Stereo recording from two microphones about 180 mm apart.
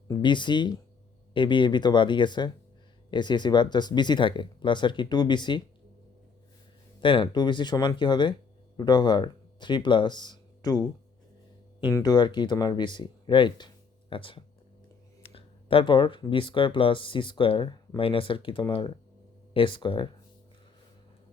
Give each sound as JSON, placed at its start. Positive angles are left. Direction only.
{"t": 0.1, "sound": "speech", "side_deg": 25}
{"t": 7.0, "sound": "speech", "side_deg": 30}
{"t": 11.9, "sound": "speech", "side_deg": 25}